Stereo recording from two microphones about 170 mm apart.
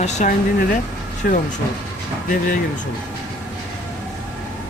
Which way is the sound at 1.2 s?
60° left (ahead or behind).